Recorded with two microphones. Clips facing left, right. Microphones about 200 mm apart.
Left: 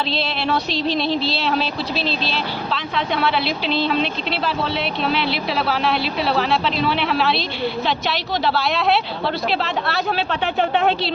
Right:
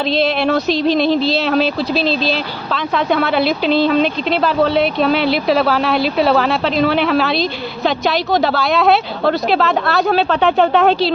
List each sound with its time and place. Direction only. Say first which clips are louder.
0.1 s speech: right 7 dB; 45° right (ahead or behind)